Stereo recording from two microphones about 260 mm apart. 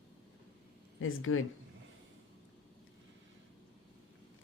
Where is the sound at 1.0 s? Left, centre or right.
Left.